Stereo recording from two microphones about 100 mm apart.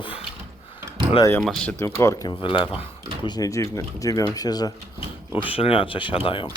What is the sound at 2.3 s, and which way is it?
Speech, 55° left (ahead or behind).